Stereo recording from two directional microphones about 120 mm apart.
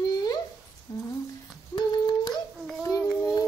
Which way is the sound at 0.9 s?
30° left (ahead or behind).